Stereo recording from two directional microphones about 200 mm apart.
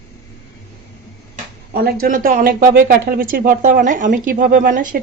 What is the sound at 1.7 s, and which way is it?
Speech, 50° right (ahead or behind).